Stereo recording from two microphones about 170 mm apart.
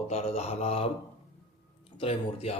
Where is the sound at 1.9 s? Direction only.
35° left (ahead or behind).